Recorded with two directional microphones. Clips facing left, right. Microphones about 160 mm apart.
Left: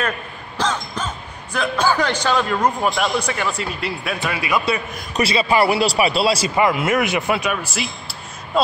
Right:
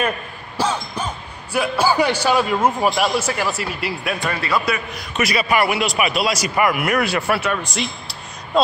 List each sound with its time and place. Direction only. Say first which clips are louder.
0.6 s speech: right 1 dB; 10° right (ahead or behind); by 4.6 s 15° left (ahead or behind)
5.2 s a man's voice: left 2 dB; 25° left (ahead or behind)
7.5 s speech: right 1 dB; 5° left (ahead or behind)